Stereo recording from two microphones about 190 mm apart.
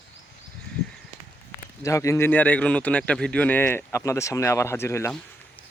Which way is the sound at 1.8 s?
15° left (ahead or behind).